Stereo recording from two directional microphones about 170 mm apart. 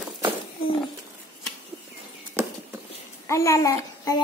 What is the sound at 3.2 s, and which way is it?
A child's voice, 15° left (ahead or behind).